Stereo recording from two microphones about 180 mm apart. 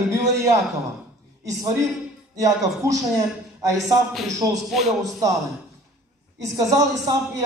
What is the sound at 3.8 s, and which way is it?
A man's voice, centre (ahead or behind).